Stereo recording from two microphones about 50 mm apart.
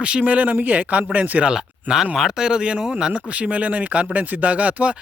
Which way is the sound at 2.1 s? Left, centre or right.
Centre.